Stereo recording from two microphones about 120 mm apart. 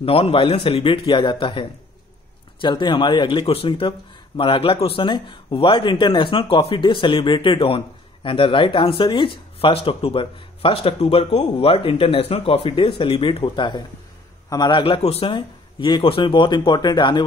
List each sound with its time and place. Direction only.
0.0 s speech: 50° left (ahead or behind)
15.0 s speech: 55° left (ahead or behind); by 17.2 s 35° left (ahead or behind)